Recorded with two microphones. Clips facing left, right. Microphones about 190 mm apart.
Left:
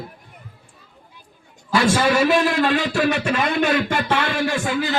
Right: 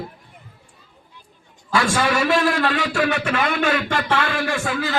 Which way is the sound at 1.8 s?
20° left (ahead or behind).